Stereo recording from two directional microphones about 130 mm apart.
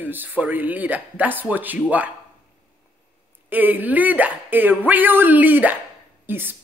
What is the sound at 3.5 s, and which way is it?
Speech, 15° right (ahead or behind).